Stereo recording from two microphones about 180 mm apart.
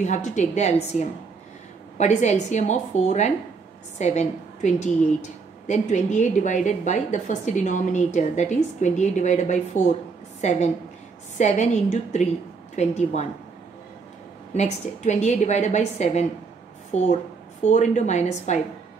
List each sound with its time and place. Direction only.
0.0 s a woman's voice: 40° left (ahead or behind)
14.5 s a woman's voice: 40° left (ahead or behind)